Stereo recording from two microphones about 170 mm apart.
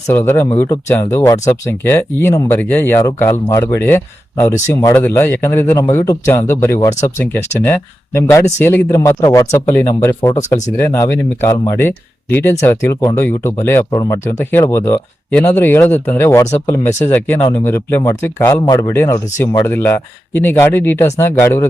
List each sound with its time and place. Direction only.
0.1 s speech: 15° left (ahead or behind)